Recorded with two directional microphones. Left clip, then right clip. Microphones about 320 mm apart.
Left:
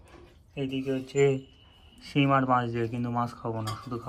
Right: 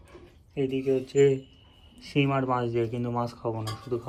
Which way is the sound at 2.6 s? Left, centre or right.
Left.